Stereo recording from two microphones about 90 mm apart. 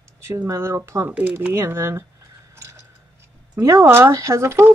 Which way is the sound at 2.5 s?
35° right (ahead or behind).